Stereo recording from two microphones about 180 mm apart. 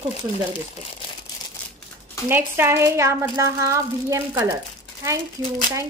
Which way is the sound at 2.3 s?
10° right (ahead or behind).